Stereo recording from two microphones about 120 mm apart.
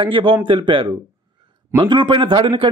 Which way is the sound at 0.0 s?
45° right (ahead or behind).